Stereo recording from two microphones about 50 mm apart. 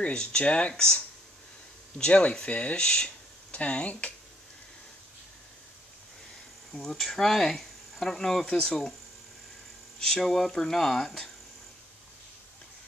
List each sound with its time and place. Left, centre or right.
0.0 s speech: centre
6.7 s speech: centre
9.9 s speech: centre